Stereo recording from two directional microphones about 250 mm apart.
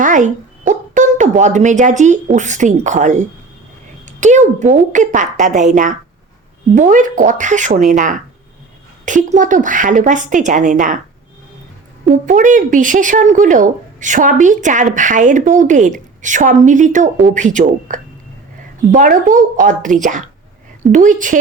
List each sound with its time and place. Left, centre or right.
0.0 s a woman's voice: right
12.2 s a woman's voice: right